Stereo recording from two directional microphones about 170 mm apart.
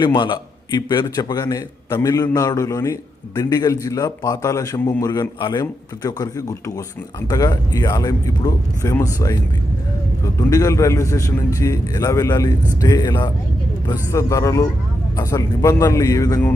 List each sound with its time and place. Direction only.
0.0 s a man's voice: 30° left (ahead or behind)